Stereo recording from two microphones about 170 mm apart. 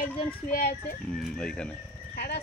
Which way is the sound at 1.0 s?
Centre (ahead or behind).